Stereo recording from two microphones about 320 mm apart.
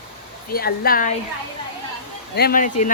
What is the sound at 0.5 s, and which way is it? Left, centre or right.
Speech, left.